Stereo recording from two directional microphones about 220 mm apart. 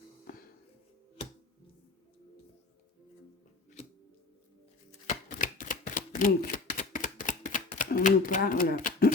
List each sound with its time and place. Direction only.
4.9 s typewriter: 35° left (ahead or behind)